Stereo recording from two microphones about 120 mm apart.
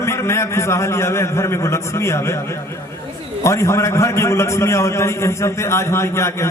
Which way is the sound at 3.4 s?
25° left (ahead or behind).